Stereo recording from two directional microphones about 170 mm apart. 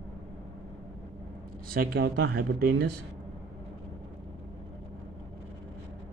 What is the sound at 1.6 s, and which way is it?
Speech, 60° right (ahead or behind).